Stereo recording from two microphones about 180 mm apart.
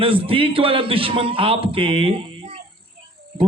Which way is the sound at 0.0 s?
30° right (ahead or behind).